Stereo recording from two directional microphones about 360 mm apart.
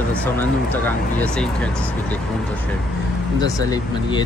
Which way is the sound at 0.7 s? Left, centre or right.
Centre.